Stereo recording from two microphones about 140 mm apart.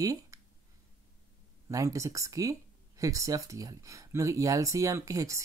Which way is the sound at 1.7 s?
25° right (ahead or behind).